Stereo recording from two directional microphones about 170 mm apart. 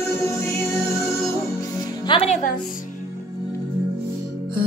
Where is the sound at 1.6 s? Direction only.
20° left (ahead or behind); by 2.5 s 40° left (ahead or behind).